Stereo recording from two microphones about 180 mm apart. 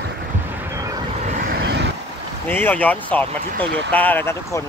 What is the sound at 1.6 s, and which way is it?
Vehicle, 75° right (ahead or behind).